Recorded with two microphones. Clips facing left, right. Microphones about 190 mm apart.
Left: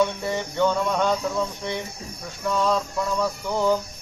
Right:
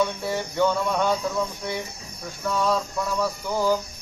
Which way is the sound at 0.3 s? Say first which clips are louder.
Even; 5° right (ahead or behind).